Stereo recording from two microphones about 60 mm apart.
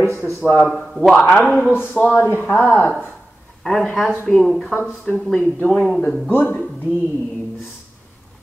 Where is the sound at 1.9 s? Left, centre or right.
Left.